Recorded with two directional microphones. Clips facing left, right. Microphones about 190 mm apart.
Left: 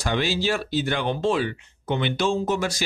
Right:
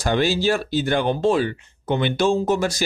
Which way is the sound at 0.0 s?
45° right (ahead or behind).